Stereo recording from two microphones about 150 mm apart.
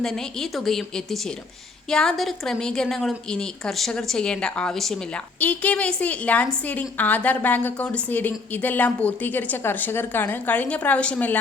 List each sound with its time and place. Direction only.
0.0 s a woman's voice: 5° left (ahead or behind)